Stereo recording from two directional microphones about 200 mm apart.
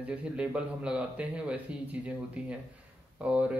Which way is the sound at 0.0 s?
5° right (ahead or behind).